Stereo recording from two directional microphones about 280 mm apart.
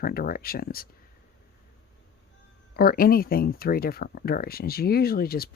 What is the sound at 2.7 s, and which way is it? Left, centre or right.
Speech, left.